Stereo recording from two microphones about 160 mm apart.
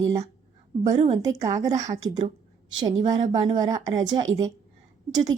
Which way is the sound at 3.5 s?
25° right (ahead or behind).